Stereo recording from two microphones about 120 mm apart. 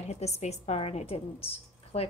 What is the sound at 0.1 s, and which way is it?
A woman's voice, 65° left (ahead or behind).